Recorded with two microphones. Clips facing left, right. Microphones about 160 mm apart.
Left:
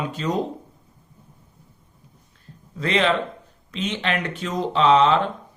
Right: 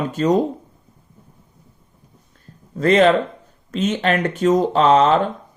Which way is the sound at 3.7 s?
45° right (ahead or behind).